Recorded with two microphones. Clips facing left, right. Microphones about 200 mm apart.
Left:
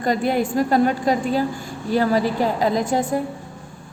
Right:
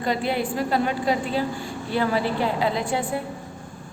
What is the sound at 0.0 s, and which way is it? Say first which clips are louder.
A woman's voice: left 4 dB; 45° left (ahead or behind).